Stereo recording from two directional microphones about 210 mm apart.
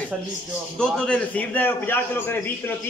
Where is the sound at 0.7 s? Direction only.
5° left (ahead or behind).